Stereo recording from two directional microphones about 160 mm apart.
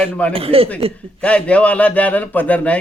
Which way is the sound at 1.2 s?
5° left (ahead or behind).